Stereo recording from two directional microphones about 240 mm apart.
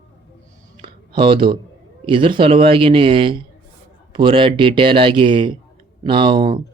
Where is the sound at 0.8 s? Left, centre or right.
Right.